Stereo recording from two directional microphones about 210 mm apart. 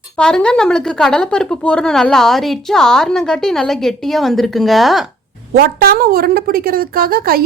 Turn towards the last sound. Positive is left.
turn(degrees=-45)  # may be behind; listen again after turning